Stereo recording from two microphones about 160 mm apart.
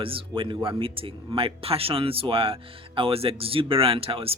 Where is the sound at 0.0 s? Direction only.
35° right (ahead or behind).